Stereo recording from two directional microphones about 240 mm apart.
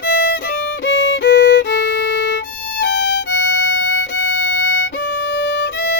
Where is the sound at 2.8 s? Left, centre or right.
Left.